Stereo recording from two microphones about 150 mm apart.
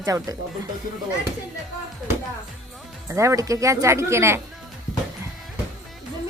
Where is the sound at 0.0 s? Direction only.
20° right (ahead or behind).